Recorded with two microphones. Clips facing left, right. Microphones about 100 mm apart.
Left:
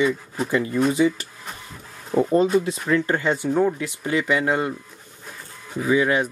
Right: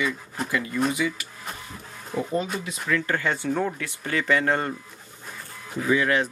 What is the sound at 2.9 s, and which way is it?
Speech, 25° left (ahead or behind).